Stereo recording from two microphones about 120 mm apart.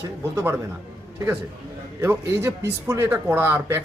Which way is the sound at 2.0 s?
20° right (ahead or behind).